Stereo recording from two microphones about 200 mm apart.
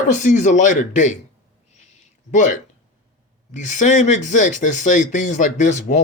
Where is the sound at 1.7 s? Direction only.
35° left (ahead or behind).